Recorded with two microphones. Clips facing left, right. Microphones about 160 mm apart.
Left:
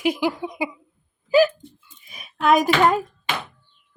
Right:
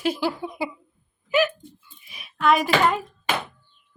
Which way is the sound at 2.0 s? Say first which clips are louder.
Left 1 dB; 45° left (ahead or behind).